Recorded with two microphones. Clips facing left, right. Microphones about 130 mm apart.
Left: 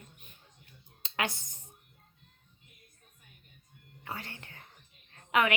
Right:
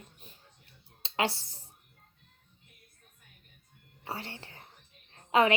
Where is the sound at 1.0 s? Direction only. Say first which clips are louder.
Right 3 dB; 30° right (ahead or behind).